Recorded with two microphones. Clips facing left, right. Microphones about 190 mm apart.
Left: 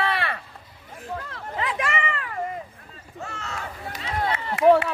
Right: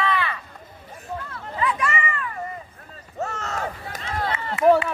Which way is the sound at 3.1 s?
45° right (ahead or behind).